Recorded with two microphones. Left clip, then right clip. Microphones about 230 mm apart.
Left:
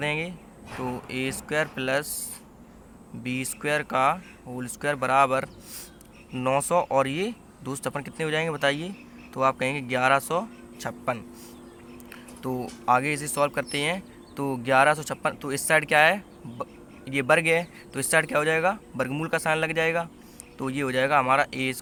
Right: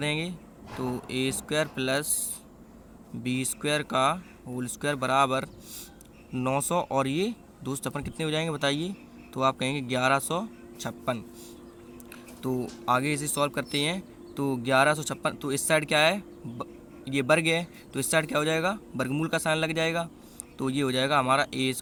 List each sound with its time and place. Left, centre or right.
0.0 s speech: right
3.2 s speech: right
12.4 s speech: right